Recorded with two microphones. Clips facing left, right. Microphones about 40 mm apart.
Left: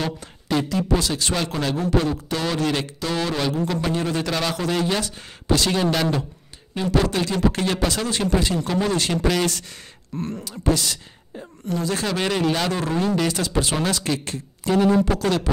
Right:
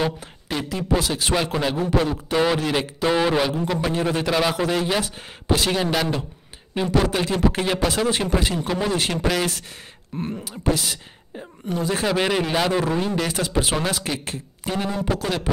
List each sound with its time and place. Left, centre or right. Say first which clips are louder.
0.0 s a man's voice: right 3 dB; centre
13.3 s a man's voice: even; centre